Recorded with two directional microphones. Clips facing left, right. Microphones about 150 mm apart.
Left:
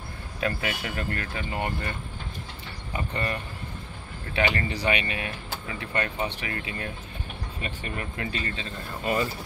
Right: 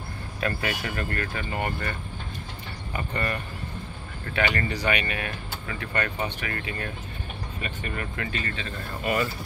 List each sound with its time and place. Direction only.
0.4 s speech: 20° left (ahead or behind)
3.0 s speech: 20° left (ahead or behind)
4.4 s speech: 25° left (ahead or behind)